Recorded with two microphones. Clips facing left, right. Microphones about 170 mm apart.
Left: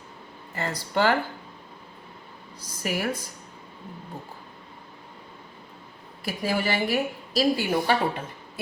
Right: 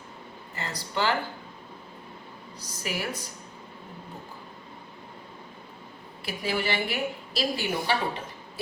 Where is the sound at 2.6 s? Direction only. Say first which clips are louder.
Left 5 dB; 50° left (ahead or behind).